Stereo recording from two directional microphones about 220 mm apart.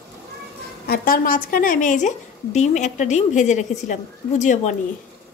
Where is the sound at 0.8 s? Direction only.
45° left (ahead or behind).